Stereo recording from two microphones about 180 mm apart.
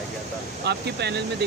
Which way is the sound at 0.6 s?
65° right (ahead or behind).